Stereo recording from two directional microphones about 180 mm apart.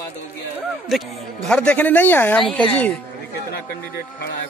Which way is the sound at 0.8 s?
Centre (ahead or behind).